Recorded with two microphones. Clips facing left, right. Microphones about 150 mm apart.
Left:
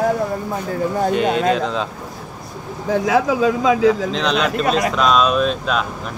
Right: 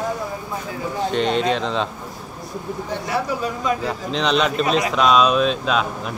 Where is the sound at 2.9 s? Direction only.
90° left.